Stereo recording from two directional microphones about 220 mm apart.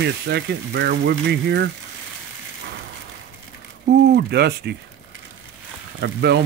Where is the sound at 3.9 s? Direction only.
45° right (ahead or behind).